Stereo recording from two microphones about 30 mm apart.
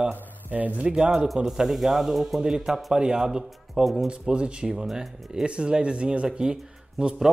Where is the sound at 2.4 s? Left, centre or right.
Right.